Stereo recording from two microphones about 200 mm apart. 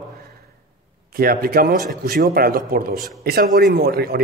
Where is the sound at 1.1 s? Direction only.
50° right (ahead or behind).